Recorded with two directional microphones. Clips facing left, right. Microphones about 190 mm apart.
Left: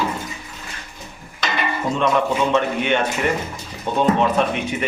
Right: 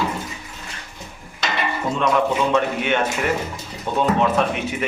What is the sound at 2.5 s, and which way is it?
Speech, 5° right (ahead or behind).